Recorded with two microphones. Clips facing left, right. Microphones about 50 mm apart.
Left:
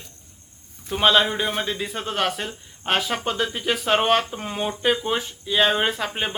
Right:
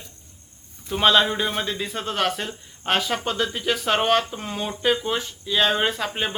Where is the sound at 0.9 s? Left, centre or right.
Centre.